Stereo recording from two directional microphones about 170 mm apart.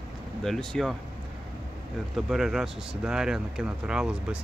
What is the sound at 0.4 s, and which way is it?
Speech, 5° left (ahead or behind).